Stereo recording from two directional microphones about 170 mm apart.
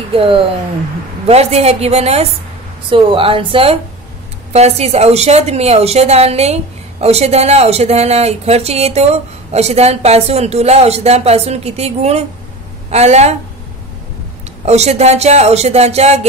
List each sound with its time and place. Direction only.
0.1 s a woman's voice: 30° right (ahead or behind)
14.6 s a woman's voice: 40° right (ahead or behind)